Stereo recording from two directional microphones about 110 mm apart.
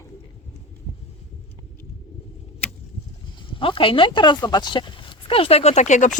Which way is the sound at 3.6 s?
55° left (ahead or behind).